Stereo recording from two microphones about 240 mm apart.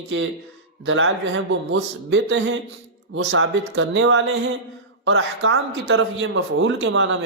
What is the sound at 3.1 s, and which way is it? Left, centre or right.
Speech, right.